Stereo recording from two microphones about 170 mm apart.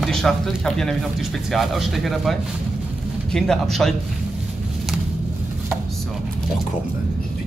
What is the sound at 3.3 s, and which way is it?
Speech, 5° left (ahead or behind).